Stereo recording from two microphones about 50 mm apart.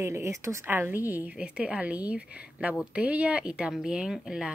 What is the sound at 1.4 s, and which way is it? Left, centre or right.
A woman's voice, right.